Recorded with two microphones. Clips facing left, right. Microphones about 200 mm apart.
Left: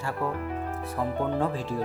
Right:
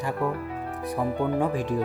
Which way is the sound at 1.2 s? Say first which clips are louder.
Right 2 dB; 15° right (ahead or behind).